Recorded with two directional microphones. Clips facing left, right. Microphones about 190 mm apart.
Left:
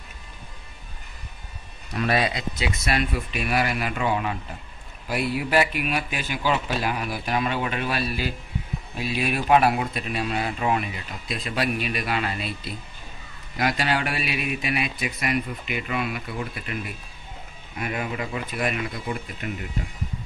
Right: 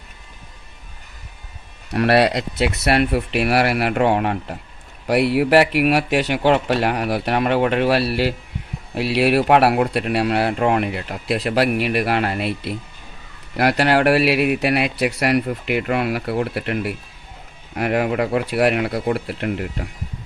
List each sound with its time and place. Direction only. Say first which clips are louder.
2.0 s speech: right 8 dB; 75° right (ahead or behind)